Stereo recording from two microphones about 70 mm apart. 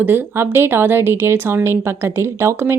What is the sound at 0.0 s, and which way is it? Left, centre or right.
A woman's voice, right.